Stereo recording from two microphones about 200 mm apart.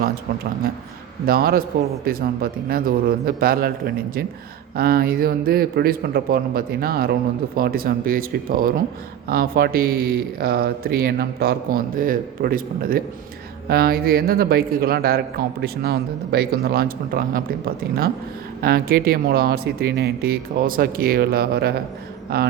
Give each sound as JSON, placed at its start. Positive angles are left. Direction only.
{"t": 1.2, "sound": "a man's voice", "side_deg": -50}